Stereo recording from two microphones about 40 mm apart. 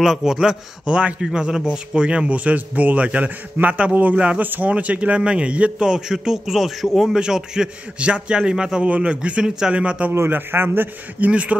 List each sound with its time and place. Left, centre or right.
0.0 s a man's voice: centre; by 3.3 s right
3.6 s a man's voice: right
4.1 s a man's voice: right
4.4 s speech: right
4.6 s a man's voice: right
5.9 s a man's voice: centre
7.2 s a man's voice: centre
8.8 s a man's voice: right
10.1 s a man's voice: right
11.1 s a man's voice: right